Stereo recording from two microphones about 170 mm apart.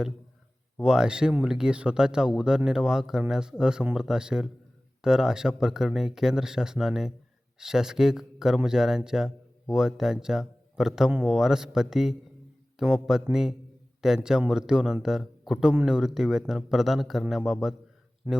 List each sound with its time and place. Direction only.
0.8 s speech: 5° right (ahead or behind)